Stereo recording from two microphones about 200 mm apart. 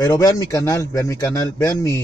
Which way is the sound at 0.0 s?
20° left (ahead or behind).